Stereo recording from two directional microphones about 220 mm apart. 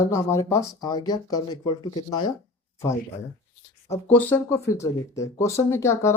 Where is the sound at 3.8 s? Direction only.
10° left (ahead or behind).